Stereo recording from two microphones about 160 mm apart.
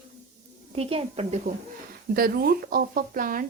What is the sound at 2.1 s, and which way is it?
A woman's voice, 70° right (ahead or behind).